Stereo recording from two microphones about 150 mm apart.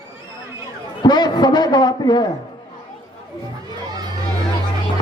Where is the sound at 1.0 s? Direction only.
30° left (ahead or behind).